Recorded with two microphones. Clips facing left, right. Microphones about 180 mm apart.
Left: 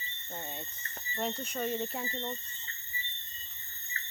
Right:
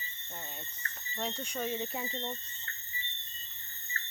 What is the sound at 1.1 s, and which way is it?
Speech, 5° left (ahead or behind).